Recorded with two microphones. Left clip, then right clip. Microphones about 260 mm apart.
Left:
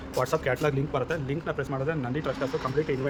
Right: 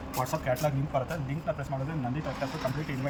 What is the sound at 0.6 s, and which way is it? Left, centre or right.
Speech, centre.